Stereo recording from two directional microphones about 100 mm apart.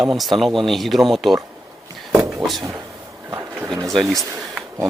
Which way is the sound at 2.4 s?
50° right (ahead or behind).